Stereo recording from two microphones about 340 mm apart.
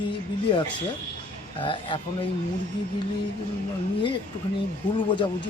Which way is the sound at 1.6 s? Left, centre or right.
Centre.